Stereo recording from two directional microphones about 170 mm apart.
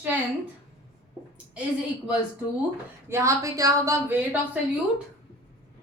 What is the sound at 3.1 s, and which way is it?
Speech, 15° right (ahead or behind).